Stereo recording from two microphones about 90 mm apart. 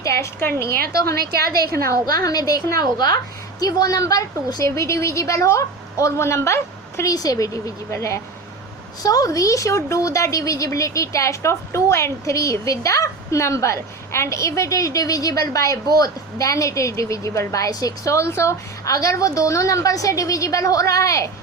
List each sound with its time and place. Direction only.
0.0 s a sound: 35° left (ahead or behind)
0.3 s a woman's voice: 30° left (ahead or behind)
1.7 s a woman's voice: 40° left (ahead or behind)
7.1 s a woman's voice: 40° left (ahead or behind)